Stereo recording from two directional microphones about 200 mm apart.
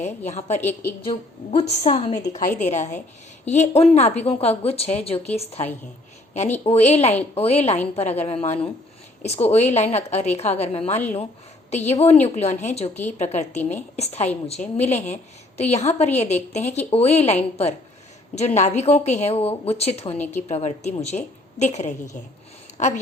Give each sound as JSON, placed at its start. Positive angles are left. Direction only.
{"t": 0.3, "sound": "a woman's voice", "side_deg": 35}
{"t": 0.6, "sound": "a woman's voice", "side_deg": 10}
{"t": 1.0, "sound": "a woman's voice", "side_deg": 30}
{"t": 6.7, "sound": "a woman's voice", "side_deg": 30}